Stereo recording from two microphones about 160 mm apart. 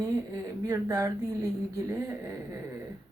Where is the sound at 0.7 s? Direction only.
15° right (ahead or behind).